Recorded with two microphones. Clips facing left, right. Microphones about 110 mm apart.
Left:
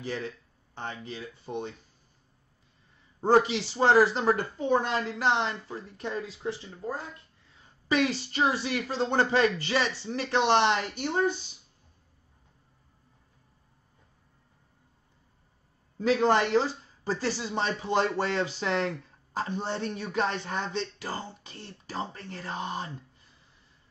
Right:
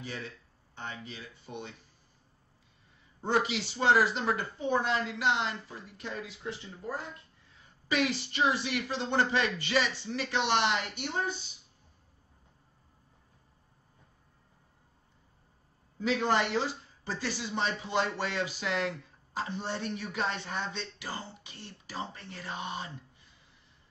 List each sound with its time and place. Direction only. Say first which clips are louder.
0.0 s speech: left 6 dB; 45° left (ahead or behind)
3.2 s a man's voice: left 7 dB; 40° left (ahead or behind)
16.0 s speech: left 5 dB; 40° left (ahead or behind)